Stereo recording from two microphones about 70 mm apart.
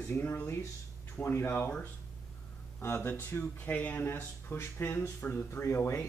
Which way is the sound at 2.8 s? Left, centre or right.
Left.